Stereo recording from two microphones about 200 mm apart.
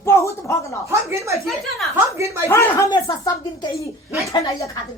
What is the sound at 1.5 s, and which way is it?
Speech, centre (ahead or behind).